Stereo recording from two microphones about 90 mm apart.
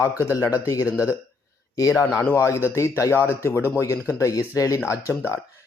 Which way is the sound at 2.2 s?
30° left (ahead or behind).